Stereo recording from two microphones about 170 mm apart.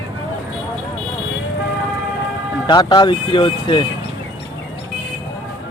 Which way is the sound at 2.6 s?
25° left (ahead or behind).